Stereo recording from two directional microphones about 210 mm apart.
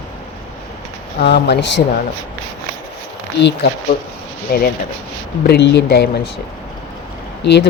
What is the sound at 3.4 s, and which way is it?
Speech, 55° left (ahead or behind).